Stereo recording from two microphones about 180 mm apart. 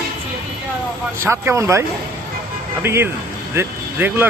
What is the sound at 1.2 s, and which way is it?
Speech, 15° right (ahead or behind).